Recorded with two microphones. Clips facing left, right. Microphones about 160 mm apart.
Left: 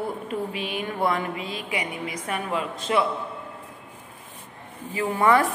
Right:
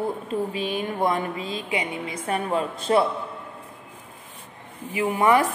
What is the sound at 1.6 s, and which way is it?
A woman's voice, 25° right (ahead or behind).